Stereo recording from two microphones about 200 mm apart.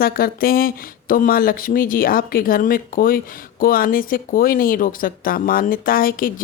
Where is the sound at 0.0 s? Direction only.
45° left (ahead or behind).